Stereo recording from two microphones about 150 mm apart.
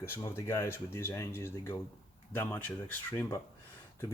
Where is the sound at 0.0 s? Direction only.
15° left (ahead or behind).